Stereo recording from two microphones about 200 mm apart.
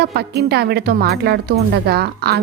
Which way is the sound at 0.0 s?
55° right (ahead or behind).